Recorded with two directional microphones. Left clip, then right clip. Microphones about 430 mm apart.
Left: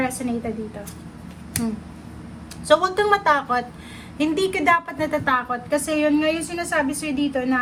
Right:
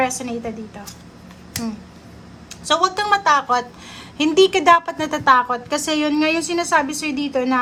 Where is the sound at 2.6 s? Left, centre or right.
Centre.